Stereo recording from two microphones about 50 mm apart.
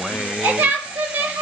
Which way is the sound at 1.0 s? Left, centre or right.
Right.